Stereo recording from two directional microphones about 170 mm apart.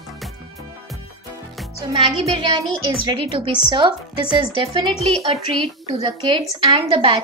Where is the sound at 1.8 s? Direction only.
25° right (ahead or behind).